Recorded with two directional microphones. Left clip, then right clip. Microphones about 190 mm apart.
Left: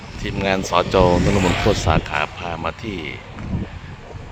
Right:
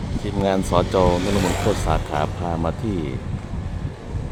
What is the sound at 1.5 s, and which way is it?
Speech, 50° right (ahead or behind).